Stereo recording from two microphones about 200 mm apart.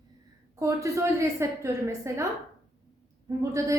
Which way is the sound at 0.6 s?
15° right (ahead or behind).